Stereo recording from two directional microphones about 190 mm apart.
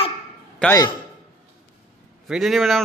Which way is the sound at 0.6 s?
15° left (ahead or behind).